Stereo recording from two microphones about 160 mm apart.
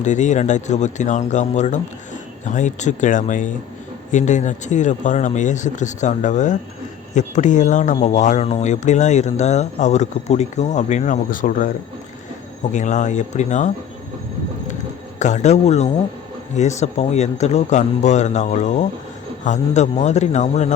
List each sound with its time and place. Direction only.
0.0 s speech: 50° left (ahead or behind)
12.7 s speech: 50° left (ahead or behind)
15.2 s speech: 50° left (ahead or behind)